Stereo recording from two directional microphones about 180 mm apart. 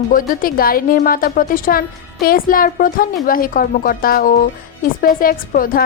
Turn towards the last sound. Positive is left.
turn(degrees=50)  # may be behind; listen again after turning